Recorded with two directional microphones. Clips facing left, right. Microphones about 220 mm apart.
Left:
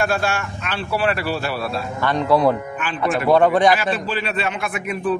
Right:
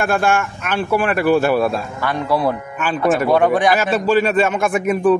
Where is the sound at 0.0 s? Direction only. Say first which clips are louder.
Right 4 dB; 50° right (ahead or behind).